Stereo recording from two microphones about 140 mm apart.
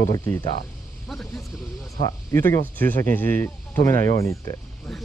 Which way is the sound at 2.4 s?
15° left (ahead or behind).